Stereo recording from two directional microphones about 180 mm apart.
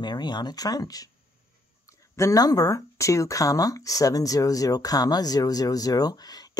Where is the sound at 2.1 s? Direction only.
20° left (ahead or behind).